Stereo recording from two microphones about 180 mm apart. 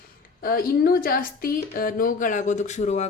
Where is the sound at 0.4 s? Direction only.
55° left (ahead or behind).